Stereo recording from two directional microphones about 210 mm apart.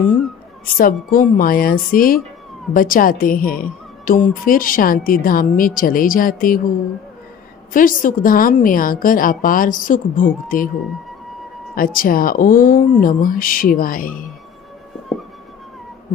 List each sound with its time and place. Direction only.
0.7 s a woman's voice: 40° left (ahead or behind)
7.7 s a woman's voice: 40° left (ahead or behind)
11.7 s speech: 40° left (ahead or behind)